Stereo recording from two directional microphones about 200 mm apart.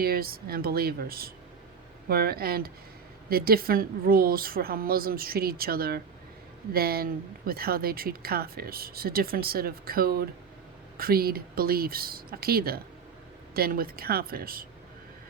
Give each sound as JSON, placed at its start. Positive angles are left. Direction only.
{"t": 0.0, "sound": "speech", "side_deg": -50}